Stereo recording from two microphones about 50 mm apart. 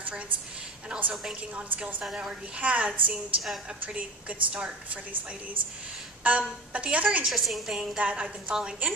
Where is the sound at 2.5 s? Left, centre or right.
Right.